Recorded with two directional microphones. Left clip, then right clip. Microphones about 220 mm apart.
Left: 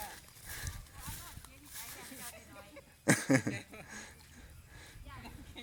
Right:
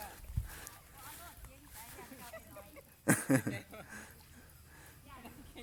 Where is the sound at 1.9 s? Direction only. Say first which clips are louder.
Left 1 dB; 5° right (ahead or behind).